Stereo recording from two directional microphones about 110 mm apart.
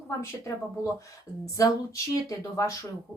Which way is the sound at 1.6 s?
30° left (ahead or behind).